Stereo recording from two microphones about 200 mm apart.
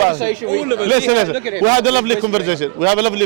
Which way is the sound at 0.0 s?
25° right (ahead or behind).